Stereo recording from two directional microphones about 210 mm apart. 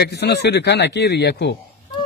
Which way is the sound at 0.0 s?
55° left (ahead or behind).